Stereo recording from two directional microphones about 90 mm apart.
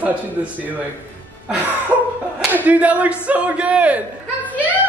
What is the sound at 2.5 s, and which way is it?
A man's voice, 20° right (ahead or behind).